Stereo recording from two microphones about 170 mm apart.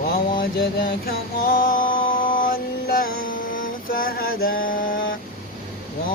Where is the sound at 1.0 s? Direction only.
60° left (ahead or behind).